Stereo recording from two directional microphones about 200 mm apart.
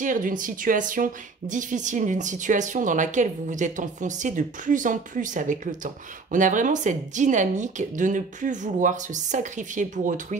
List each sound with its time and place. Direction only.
0.0 s speech: 40° right (ahead or behind)